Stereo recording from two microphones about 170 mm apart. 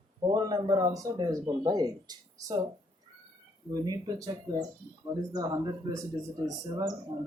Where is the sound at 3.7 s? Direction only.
20° right (ahead or behind).